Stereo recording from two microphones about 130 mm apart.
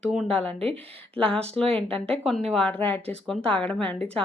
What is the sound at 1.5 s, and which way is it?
Speech, 5° left (ahead or behind).